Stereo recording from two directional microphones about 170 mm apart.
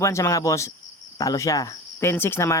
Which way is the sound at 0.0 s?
15° left (ahead or behind).